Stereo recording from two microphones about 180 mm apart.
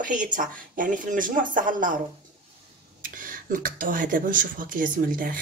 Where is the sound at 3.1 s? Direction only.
50° right (ahead or behind).